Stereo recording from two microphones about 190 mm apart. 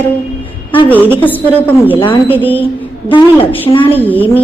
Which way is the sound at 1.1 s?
10° left (ahead or behind).